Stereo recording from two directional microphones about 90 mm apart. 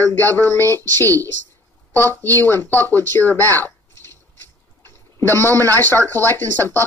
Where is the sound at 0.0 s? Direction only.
25° left (ahead or behind).